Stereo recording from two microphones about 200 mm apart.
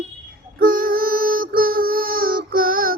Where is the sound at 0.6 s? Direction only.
45° right (ahead or behind).